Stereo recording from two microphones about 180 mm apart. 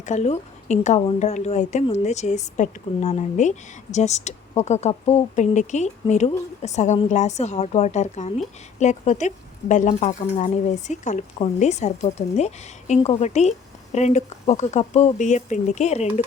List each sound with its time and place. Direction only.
0.0 s speech: 40° left (ahead or behind)